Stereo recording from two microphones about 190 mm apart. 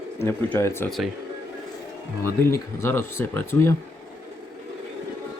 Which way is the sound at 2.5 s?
15° left (ahead or behind).